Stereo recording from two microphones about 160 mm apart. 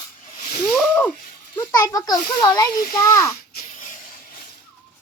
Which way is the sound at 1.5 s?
10° left (ahead or behind).